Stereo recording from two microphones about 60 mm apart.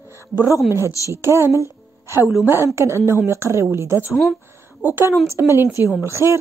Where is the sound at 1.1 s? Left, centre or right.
Right.